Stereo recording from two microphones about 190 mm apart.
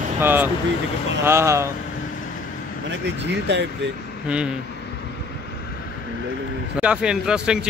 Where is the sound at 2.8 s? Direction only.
65° right (ahead or behind).